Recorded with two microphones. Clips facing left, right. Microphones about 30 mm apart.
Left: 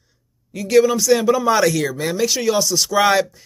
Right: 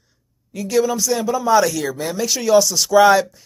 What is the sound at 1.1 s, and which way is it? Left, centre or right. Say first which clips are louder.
Speech: right 1 dB; left.